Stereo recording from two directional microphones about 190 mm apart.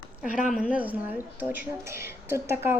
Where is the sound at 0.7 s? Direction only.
5° right (ahead or behind).